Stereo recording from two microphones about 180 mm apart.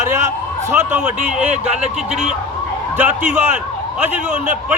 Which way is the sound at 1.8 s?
40° right (ahead or behind).